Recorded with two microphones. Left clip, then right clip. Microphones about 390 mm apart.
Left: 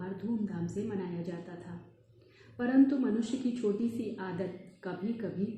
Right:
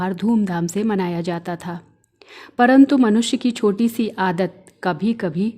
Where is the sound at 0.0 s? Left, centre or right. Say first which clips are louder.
Right 16 dB; right.